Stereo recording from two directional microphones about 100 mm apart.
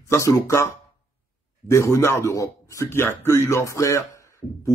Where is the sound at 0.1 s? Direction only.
30° left (ahead or behind).